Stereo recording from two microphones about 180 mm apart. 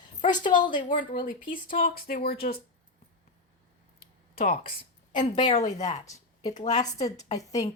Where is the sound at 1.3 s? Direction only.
50° left (ahead or behind).